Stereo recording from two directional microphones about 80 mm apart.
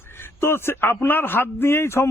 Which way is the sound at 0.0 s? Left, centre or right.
Left.